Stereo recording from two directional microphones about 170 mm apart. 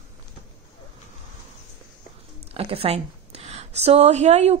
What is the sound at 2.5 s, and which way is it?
Speech, 35° right (ahead or behind).